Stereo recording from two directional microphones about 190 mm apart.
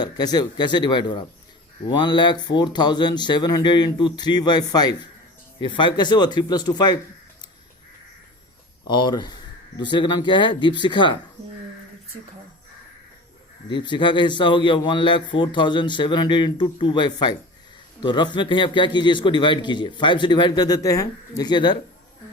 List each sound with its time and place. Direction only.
0.0 s a man's voice: 20° left (ahead or behind)
8.9 s a man's voice: 25° left (ahead or behind)
13.7 s a man's voice: 25° left (ahead or behind)